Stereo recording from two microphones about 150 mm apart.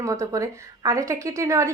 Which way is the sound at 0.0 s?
20° right (ahead or behind).